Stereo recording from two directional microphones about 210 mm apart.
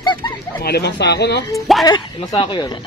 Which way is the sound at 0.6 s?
50° left (ahead or behind).